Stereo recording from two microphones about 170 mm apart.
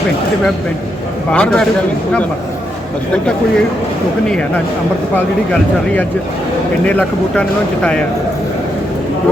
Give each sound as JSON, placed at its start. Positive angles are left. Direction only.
{"t": 1.3, "sound": "a man's voice", "side_deg": 5}
{"t": 4.3, "sound": "a man's voice", "side_deg": 5}
{"t": 6.8, "sound": "speech", "side_deg": 10}